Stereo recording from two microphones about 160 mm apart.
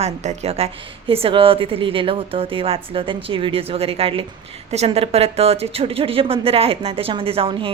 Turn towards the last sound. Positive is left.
turn(degrees=-35)  # may be behind; listen again after turning